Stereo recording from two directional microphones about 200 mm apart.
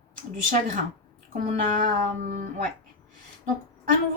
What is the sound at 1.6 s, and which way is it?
A woman's voice, 40° right (ahead or behind).